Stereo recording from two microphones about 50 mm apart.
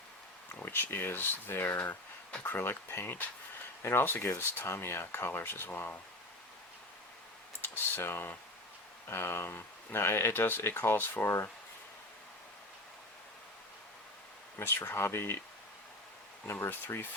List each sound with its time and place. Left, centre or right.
0.6 s speech: left
5.4 s speech: left
7.6 s speech: left
14.6 s speech: left
16.5 s speech: left